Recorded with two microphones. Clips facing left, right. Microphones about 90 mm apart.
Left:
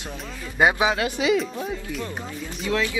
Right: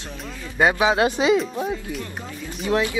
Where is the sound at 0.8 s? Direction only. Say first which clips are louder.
Right 4 dB; 25° right (ahead or behind).